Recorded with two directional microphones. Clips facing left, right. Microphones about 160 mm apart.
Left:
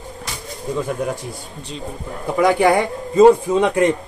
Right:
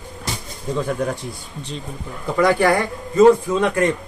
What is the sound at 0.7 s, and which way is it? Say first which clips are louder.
Speech: right 1 dB; 5° left (ahead or behind).